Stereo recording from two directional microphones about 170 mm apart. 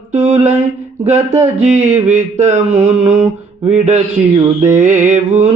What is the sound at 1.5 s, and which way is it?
Mantra, 40° right (ahead or behind).